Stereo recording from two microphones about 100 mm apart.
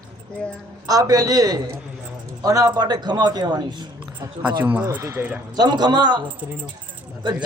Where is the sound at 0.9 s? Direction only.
40° right (ahead or behind).